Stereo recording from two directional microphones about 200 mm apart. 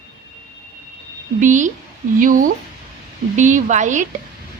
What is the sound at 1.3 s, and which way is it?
A woman's voice, 40° right (ahead or behind).